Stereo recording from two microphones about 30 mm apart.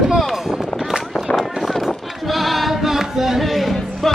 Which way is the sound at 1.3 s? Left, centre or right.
Centre.